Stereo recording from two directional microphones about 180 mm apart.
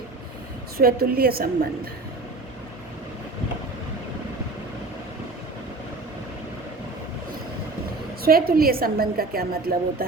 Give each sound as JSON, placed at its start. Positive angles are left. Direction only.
{"t": 0.8, "sound": "a woman's voice", "side_deg": -55}
{"t": 8.2, "sound": "a woman's voice", "side_deg": -55}